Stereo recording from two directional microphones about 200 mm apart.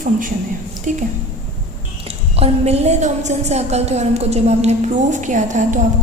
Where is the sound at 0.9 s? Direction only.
40° right (ahead or behind).